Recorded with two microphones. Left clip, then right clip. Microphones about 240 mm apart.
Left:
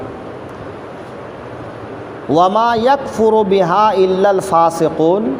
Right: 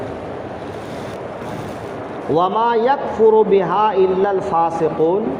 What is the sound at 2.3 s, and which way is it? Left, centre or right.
A man's voice, left.